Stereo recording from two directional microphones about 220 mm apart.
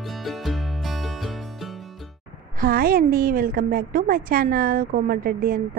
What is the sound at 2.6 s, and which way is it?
A woman's voice, 40° right (ahead or behind).